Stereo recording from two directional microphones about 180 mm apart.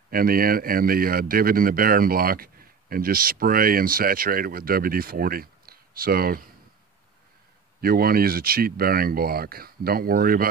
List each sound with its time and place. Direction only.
0.1 s speech: 55° right (ahead or behind)
7.8 s speech: 55° right (ahead or behind)